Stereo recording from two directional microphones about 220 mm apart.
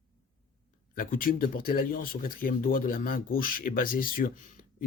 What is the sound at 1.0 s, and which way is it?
Speech, 40° left (ahead or behind).